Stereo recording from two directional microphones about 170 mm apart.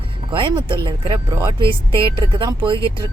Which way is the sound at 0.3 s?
30° right (ahead or behind).